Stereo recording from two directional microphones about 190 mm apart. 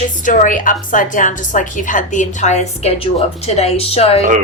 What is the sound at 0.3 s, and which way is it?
A woman's voice, 45° left (ahead or behind).